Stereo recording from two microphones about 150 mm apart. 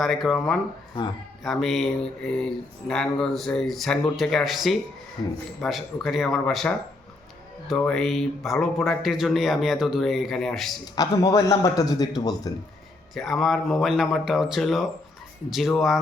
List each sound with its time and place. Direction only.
0.0 s speech: centre (ahead or behind)
10.9 s a man's voice: 25° left (ahead or behind)
13.1 s speech: centre (ahead or behind)